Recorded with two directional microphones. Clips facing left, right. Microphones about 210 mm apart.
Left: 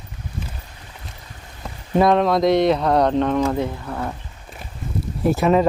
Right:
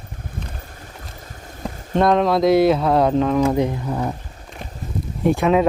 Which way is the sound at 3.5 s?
15° right (ahead or behind).